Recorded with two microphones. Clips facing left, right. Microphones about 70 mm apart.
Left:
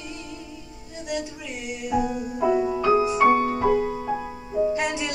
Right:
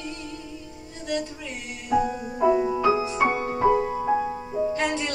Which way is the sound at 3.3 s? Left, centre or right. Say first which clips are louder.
Left 2 dB; centre.